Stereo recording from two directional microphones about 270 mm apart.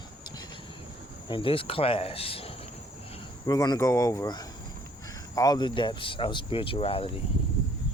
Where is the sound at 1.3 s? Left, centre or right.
Centre.